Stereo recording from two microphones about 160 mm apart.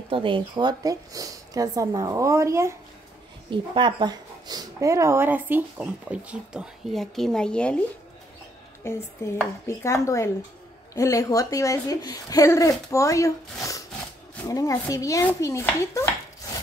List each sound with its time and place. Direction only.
0.1 s speech: 30° right (ahead or behind)
3.4 s speech: 30° right (ahead or behind); by 7.7 s 5° left (ahead or behind)
8.8 s speech: 15° left (ahead or behind)